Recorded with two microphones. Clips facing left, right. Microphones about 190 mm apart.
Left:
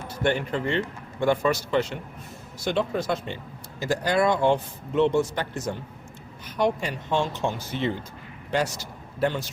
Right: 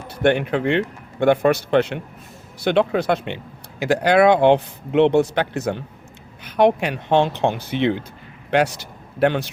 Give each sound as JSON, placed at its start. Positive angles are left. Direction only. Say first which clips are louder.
{"t": 0.1, "sound": "a man's voice", "louder": "right 7 dB", "side_deg": -65}